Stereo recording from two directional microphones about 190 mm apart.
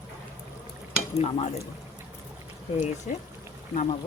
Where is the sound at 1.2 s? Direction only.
30° left (ahead or behind).